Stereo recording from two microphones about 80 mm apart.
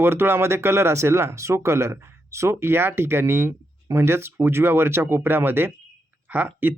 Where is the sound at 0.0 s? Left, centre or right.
Right.